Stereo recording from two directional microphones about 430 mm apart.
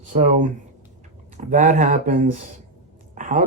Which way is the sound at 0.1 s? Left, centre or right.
Centre.